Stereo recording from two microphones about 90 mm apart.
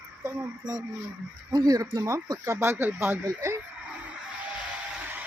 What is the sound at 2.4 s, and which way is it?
Speech, 30° right (ahead or behind).